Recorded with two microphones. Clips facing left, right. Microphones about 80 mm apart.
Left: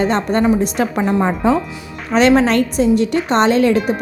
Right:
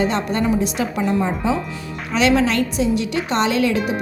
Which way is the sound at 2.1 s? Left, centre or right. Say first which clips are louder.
Left 5 dB; left.